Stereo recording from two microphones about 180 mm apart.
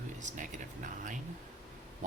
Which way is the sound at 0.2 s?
40° right (ahead or behind).